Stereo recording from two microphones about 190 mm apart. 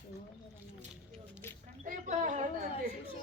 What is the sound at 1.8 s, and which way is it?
Speech, 45° right (ahead or behind).